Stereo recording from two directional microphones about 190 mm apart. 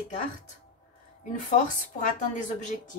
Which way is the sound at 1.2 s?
40° left (ahead or behind).